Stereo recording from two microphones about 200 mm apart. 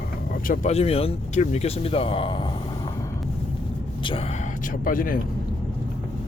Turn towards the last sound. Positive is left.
turn(degrees=45)  # may be behind; listen again after turning